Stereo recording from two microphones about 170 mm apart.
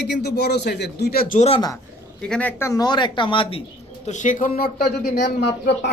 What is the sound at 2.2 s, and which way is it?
Speech, 5° left (ahead or behind).